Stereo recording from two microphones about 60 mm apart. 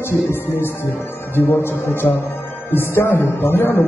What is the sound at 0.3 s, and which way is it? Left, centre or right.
A man's voice, left.